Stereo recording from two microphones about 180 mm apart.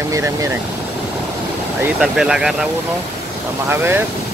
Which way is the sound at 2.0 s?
5° right (ahead or behind).